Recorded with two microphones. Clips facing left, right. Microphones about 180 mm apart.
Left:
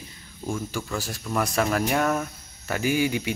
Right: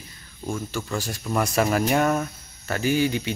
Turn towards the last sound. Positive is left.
turn(degrees=10)  # may be behind; listen again after turning